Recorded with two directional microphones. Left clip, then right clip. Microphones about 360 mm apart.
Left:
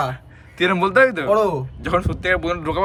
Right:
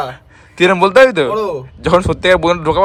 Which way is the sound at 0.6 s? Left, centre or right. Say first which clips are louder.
Right 7 dB; centre.